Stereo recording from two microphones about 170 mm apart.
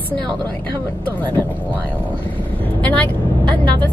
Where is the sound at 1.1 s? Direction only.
10° left (ahead or behind).